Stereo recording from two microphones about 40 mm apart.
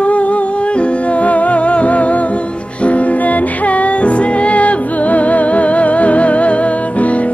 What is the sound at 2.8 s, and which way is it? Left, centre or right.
Music, left.